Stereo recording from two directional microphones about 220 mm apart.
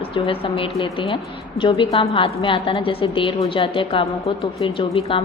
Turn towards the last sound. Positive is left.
turn(degrees=25)  # may be behind; listen again after turning